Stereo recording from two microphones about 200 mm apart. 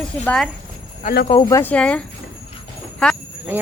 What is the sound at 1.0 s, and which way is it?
Speech, 45° left (ahead or behind).